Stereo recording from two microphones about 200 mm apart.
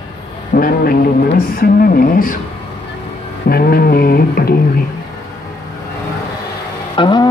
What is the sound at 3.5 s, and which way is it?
A man's voice, 50° left (ahead or behind).